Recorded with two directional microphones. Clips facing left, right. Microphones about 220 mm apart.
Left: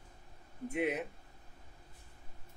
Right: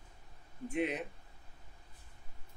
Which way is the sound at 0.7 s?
5° left (ahead or behind).